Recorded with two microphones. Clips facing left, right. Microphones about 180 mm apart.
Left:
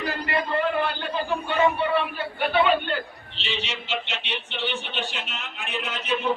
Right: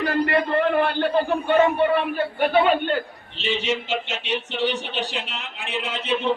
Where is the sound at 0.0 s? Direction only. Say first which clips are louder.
Right 6 dB; 55° right (ahead or behind).